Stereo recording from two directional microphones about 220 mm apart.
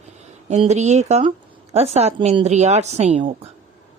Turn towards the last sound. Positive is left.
turn(degrees=-25)  # may be behind; listen again after turning